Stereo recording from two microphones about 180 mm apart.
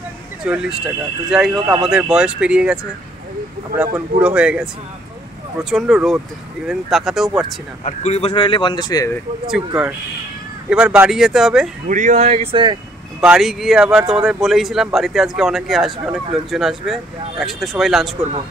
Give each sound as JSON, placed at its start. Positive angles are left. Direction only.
{"t": 0.5, "sound": "speech", "side_deg": -5}
{"t": 7.8, "sound": "speech", "side_deg": 40}
{"t": 9.7, "sound": "speech", "side_deg": -5}
{"t": 11.9, "sound": "speech", "side_deg": -45}
{"t": 13.2, "sound": "speech", "side_deg": -5}